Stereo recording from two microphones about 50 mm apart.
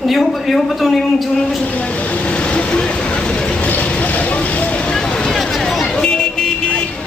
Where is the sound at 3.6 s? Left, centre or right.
Left.